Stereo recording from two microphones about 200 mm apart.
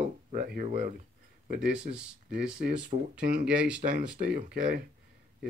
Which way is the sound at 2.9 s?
35° right (ahead or behind).